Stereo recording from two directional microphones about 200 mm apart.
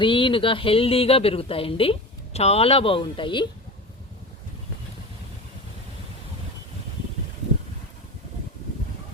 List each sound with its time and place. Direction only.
0.0 s speech: 25° left (ahead or behind)